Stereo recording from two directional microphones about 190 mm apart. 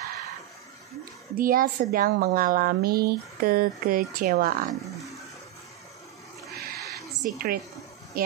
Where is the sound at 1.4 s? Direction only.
50° right (ahead or behind).